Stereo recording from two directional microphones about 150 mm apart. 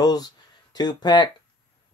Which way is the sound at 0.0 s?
25° left (ahead or behind).